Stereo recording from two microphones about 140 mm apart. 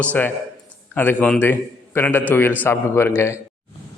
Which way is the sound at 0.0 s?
10° left (ahead or behind).